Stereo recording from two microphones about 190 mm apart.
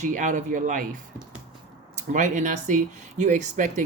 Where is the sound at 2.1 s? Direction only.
40° right (ahead or behind).